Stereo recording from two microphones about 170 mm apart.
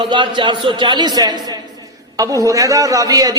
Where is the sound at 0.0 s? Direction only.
30° right (ahead or behind).